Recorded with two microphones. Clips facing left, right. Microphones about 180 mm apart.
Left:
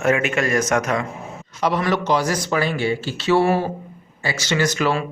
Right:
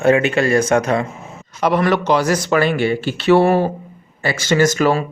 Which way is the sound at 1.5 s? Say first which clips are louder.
Right 4 dB; 55° right (ahead or behind).